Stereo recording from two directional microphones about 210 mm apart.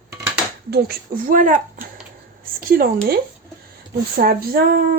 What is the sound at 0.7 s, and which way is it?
Speech, 45° right (ahead or behind).